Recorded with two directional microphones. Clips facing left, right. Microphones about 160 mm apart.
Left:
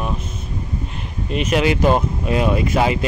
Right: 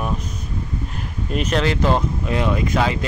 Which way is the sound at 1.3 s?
10° left (ahead or behind).